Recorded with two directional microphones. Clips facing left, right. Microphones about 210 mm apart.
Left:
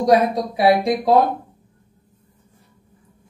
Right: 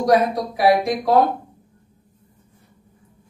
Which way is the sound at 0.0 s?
25° left (ahead or behind).